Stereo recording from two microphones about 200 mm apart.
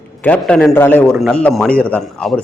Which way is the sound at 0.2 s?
5° left (ahead or behind).